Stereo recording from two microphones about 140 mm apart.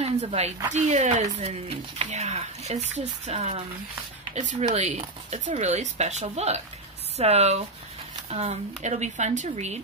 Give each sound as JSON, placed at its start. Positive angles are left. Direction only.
{"t": 0.0, "sound": "a woman's voice", "side_deg": -50}
{"t": 4.4, "sound": "speech", "side_deg": -60}